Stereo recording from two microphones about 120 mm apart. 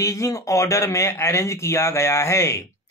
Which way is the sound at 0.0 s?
25° left (ahead or behind).